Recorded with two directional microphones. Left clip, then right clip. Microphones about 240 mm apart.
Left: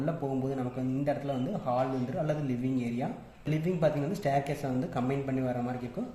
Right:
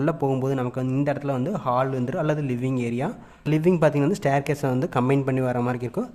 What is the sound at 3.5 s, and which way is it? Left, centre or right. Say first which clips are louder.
Speech: right 9 dB; right.